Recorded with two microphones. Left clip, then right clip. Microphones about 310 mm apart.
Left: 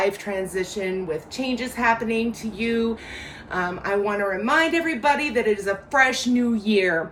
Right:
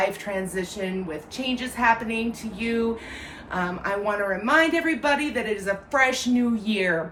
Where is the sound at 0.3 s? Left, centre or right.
Centre.